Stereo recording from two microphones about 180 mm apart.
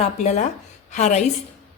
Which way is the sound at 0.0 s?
40° left (ahead or behind).